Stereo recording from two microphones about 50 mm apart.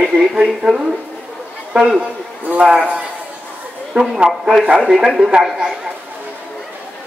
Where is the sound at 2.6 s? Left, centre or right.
Centre.